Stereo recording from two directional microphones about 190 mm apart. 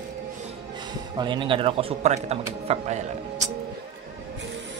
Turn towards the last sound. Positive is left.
turn(degrees=-35)  # may be behind; listen again after turning